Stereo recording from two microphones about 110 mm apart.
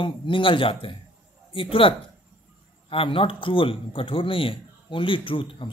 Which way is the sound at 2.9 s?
55° left (ahead or behind).